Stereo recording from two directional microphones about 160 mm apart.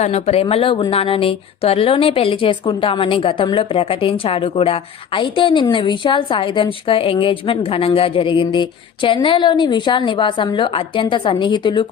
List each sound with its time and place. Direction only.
0.0 s a woman's voice: 40° left (ahead or behind)